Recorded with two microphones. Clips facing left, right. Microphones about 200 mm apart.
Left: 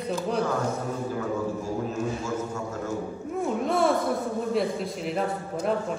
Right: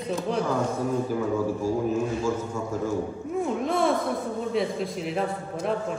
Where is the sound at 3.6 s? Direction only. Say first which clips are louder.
Left 2 dB; centre (ahead or behind).